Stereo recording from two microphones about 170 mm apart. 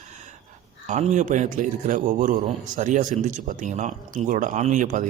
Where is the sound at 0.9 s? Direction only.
45° right (ahead or behind).